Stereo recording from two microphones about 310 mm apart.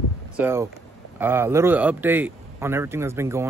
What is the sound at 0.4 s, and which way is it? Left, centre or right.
Speech, centre.